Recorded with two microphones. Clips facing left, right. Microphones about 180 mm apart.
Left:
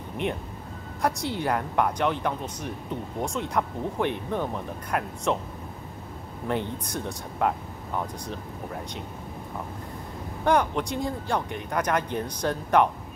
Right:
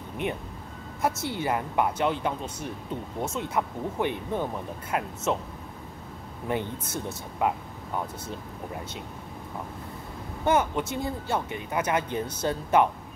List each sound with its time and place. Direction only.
1.0 s speech: 5° right (ahead or behind)
6.4 s speech: 5° right (ahead or behind)
10.4 s speech: 5° right (ahead or behind)